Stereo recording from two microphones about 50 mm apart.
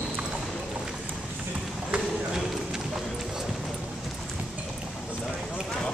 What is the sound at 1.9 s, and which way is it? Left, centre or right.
Run, centre.